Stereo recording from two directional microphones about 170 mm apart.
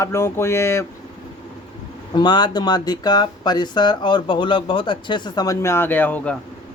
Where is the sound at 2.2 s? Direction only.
25° left (ahead or behind); by 6.3 s 10° left (ahead or behind).